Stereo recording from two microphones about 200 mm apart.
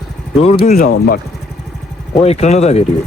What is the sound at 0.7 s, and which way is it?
Speech, 45° left (ahead or behind).